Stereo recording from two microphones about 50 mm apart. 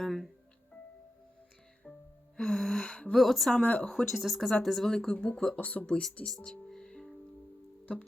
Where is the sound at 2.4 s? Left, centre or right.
Centre.